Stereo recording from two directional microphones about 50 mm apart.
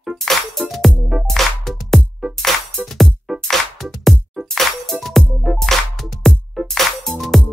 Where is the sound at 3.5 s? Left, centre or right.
Centre.